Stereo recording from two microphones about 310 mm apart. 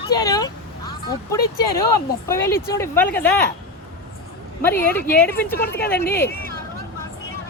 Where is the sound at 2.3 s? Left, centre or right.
Centre.